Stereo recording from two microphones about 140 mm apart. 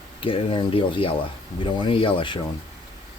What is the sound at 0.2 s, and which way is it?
Speech, 40° left (ahead or behind).